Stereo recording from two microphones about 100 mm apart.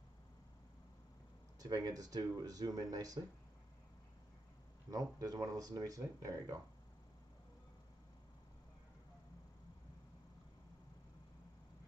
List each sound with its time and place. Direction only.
1.6 s speech: 40° right (ahead or behind)
5.2 s speech: 35° right (ahead or behind)